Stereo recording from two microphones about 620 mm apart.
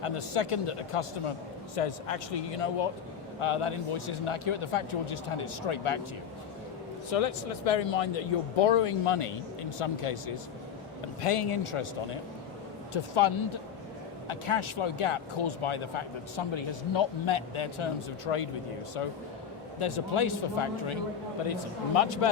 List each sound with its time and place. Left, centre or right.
0.0 s speech: left
7.1 s speech: left
11.2 s speech: left
12.9 s speech: left
19.8 s speech: left
21.4 s speech: left